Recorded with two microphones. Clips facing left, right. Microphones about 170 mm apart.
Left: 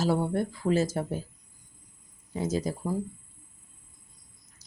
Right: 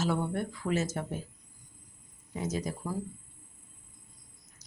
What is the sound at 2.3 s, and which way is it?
Speech, 30° left (ahead or behind).